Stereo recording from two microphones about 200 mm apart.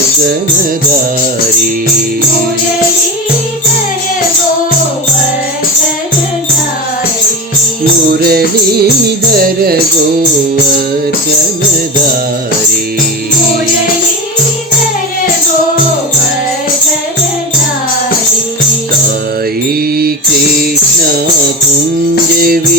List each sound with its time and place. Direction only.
8.2 s music: 50° right (ahead or behind)
22.4 s music: 50° right (ahead or behind)